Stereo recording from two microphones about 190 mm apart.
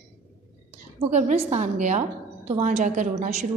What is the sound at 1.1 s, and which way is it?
A woman's voice, 35° right (ahead or behind).